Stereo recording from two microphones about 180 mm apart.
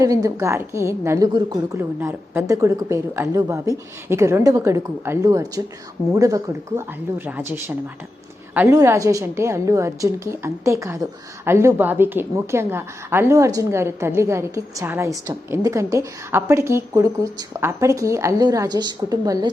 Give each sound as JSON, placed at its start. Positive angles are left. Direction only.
{"t": 0.0, "sound": "a woman's voice", "side_deg": -20}
{"t": 8.5, "sound": "a woman's voice", "side_deg": -15}